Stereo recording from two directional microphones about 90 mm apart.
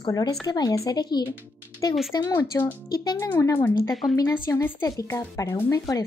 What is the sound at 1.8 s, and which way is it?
Speech, 35° left (ahead or behind).